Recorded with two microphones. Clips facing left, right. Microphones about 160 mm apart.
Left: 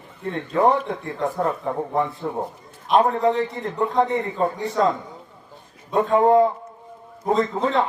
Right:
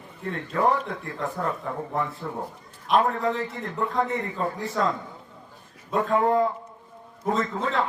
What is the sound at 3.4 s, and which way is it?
Speech, 20° left (ahead or behind).